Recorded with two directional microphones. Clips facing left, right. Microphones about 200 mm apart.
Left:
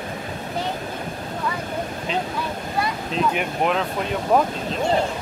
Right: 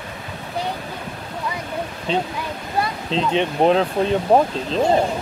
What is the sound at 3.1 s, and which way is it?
Speech, 25° right (ahead or behind).